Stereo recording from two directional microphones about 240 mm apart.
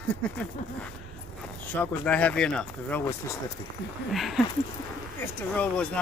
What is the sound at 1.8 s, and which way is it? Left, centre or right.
Speech, centre.